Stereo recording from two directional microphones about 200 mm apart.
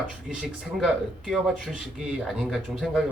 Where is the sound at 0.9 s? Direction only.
5° right (ahead or behind).